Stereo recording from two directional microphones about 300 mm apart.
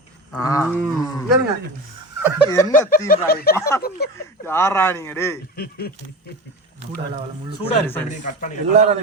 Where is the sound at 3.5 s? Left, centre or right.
Centre.